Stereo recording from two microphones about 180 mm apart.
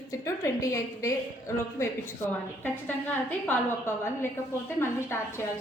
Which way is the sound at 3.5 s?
15° left (ahead or behind).